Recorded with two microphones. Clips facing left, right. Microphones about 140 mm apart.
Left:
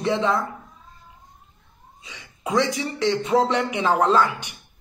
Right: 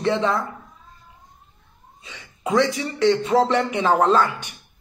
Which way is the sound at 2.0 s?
15° left (ahead or behind).